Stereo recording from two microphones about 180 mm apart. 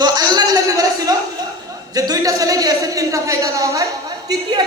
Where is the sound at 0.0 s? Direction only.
25° right (ahead or behind).